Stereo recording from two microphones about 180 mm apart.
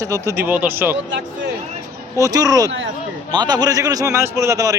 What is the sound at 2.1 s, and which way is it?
A man's voice, 20° right (ahead or behind).